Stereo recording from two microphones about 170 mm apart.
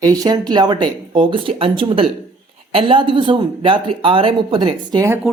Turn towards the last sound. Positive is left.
turn(degrees=0)  # may be behind; listen again after turning